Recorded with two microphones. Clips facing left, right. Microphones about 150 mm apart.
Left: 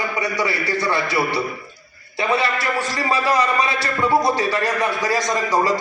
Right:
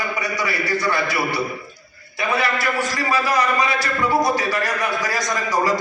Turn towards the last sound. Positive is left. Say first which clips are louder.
# left 2 dB
turn(degrees=30)  # may be behind; listen again after turning